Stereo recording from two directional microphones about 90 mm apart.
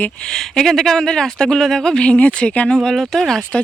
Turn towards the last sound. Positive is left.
turn(degrees=5)  # may be behind; listen again after turning